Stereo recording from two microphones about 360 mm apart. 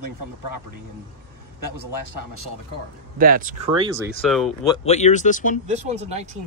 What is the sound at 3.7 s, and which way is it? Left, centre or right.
Speech, centre.